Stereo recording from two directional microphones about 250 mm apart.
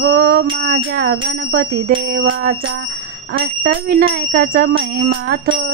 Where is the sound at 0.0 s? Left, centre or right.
Right.